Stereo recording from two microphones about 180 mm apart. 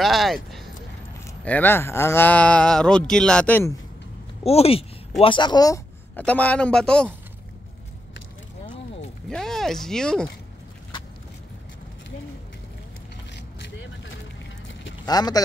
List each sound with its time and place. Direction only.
0.0 s speech: centre (ahead or behind)
4.4 s speech: 35° left (ahead or behind)
6.1 s speech: 10° left (ahead or behind)
9.3 s speech: centre (ahead or behind)
15.0 s speech: 20° left (ahead or behind)